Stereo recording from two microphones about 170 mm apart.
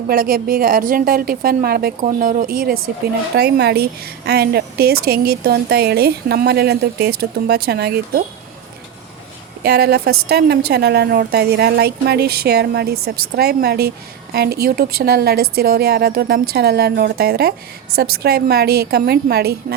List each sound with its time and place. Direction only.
0.1 s a woman's voice: 60° right (ahead or behind)
3.3 s a woman's voice: 70° right (ahead or behind)
9.6 s a woman's voice: 70° right (ahead or behind)